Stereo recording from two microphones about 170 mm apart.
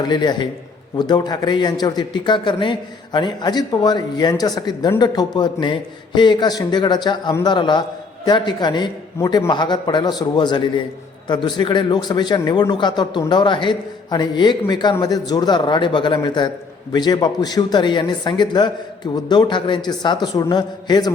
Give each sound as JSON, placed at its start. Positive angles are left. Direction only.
{"t": 0.0, "sound": "a man's voice", "side_deg": 25}